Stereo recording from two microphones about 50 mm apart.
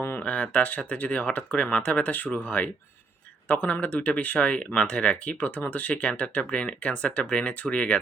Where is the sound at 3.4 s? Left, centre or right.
Left.